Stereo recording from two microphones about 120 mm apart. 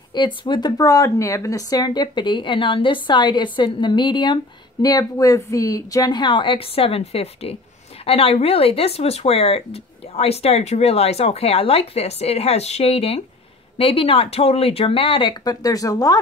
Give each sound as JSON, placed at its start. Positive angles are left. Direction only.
{"t": 0.1, "sound": "speech", "side_deg": 40}
{"t": 15.4, "sound": "speech", "side_deg": 30}